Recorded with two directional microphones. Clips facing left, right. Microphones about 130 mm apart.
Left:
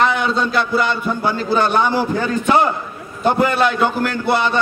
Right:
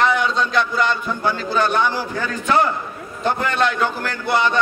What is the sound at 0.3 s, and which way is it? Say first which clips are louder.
A man's voice: left 2 dB; 5° left (ahead or behind).